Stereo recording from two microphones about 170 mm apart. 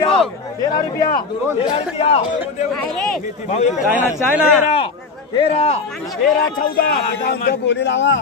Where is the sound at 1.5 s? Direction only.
35° left (ahead or behind).